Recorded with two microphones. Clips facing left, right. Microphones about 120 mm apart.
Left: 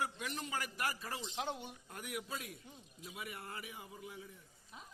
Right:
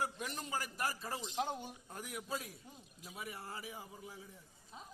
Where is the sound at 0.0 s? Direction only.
40° right (ahead or behind).